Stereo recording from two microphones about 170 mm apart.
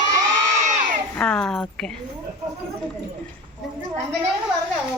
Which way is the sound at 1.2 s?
5° left (ahead or behind).